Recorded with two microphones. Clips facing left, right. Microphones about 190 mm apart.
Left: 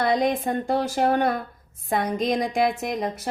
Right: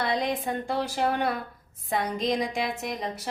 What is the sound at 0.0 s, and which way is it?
A woman's voice, 45° left (ahead or behind).